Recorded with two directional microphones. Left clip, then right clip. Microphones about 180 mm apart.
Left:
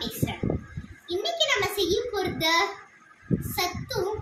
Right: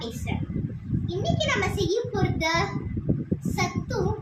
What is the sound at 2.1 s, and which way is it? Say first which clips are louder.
Child singing: left 1 dB; 5° right (ahead or behind).